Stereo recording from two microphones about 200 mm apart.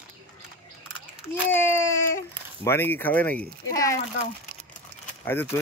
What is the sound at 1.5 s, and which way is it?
Speech, 15° left (ahead or behind).